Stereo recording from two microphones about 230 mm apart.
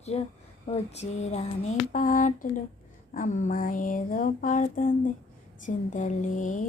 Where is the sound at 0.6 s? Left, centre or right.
Left.